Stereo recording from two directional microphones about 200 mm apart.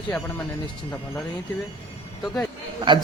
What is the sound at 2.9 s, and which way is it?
Speech, 25° right (ahead or behind).